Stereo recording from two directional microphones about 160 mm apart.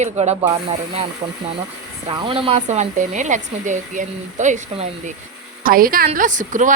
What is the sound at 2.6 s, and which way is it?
A woman's voice, 50° right (ahead or behind).